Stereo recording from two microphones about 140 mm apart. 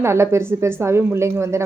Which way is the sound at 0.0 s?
20° right (ahead or behind).